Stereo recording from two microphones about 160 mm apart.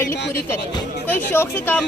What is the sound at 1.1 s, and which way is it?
Speech, 10° left (ahead or behind).